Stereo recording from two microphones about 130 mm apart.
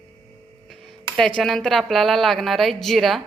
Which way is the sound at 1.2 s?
5° left (ahead or behind).